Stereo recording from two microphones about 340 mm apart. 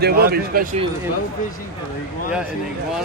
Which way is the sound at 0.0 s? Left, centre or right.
Right.